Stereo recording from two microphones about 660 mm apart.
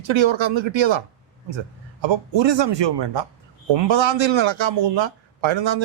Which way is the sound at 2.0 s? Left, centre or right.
Right.